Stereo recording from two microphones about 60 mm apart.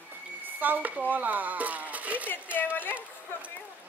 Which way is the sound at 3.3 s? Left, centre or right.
Left.